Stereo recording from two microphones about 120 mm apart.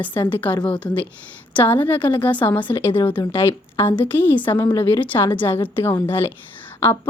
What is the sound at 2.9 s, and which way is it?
Speech, 45° left (ahead or behind).